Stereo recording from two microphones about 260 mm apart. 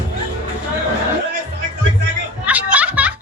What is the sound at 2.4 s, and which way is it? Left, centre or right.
Music, centre.